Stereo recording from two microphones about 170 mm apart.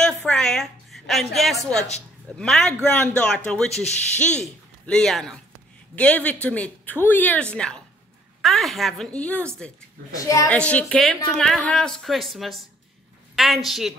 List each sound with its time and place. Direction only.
0.3 s a woman's voice: 5° left (ahead or behind)
10.1 s a woman's voice: 20° left (ahead or behind)
10.5 s a woman's voice: 5° left (ahead or behind)